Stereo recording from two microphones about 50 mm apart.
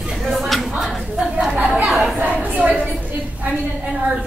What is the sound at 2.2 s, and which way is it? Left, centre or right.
Speech, right.